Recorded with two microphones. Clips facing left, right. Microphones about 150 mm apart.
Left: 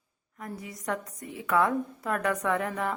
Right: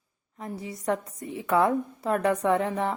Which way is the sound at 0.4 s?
30° right (ahead or behind).